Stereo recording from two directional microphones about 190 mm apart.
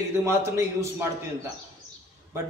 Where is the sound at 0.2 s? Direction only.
15° right (ahead or behind).